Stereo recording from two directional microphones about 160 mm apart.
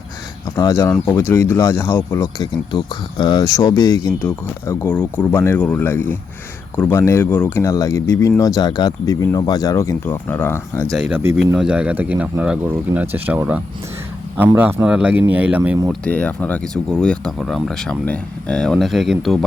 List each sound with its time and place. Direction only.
0.8 s speech: 10° left (ahead or behind)
2.2 s speech: 25° left (ahead or behind)
10.9 s speech: 5° right (ahead or behind)
15.9 s speech: 10° left (ahead or behind)